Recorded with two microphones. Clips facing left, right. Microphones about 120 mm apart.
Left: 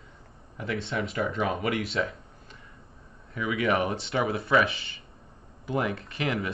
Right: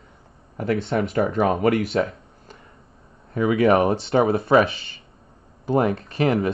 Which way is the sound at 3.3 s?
40° right (ahead or behind).